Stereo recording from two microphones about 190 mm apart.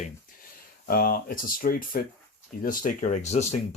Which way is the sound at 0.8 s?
50° left (ahead or behind).